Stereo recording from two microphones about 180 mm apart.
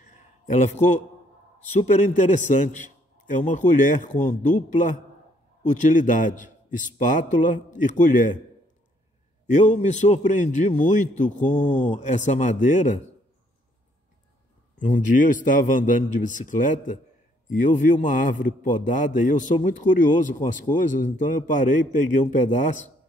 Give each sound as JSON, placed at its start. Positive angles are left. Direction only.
{"t": 0.5, "sound": "a man's voice", "side_deg": 45}
{"t": 3.3, "sound": "a man's voice", "side_deg": 45}
{"t": 9.5, "sound": "a man's voice", "side_deg": 45}
{"t": 14.8, "sound": "a man's voice", "side_deg": 45}